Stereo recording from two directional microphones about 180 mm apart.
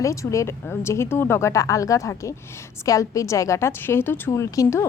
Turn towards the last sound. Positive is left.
turn(degrees=15)  # may be behind; listen again after turning